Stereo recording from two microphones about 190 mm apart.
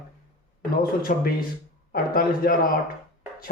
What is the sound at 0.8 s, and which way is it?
Speech, 50° left (ahead or behind).